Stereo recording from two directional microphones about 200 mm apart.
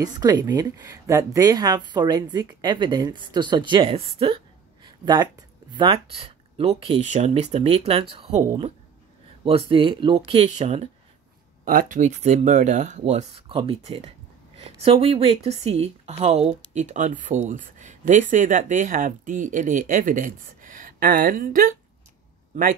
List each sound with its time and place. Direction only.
0.0 s a woman's voice: 20° right (ahead or behind); by 21.7 s 45° right (ahead or behind)